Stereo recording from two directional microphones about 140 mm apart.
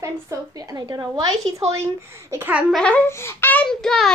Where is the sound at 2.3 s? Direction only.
15° right (ahead or behind).